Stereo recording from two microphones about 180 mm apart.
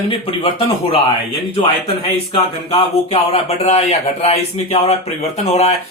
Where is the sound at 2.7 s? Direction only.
35° left (ahead or behind).